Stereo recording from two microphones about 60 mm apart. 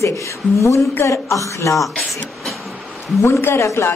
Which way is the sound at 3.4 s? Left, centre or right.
Left.